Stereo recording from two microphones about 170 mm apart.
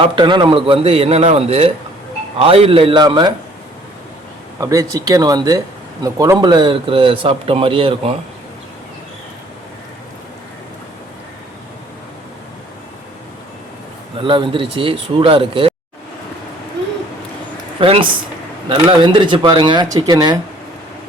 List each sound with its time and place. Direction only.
0.0 s a man's voice: 25° right (ahead or behind)
4.6 s speech: 20° right (ahead or behind)
14.2 s a man's voice: 30° right (ahead or behind)
17.7 s speech: 35° right (ahead or behind)